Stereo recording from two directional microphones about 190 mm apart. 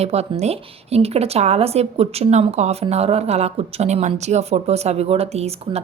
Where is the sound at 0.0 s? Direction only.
35° right (ahead or behind).